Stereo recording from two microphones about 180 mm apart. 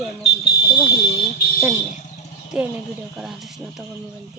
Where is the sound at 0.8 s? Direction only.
55° left (ahead or behind).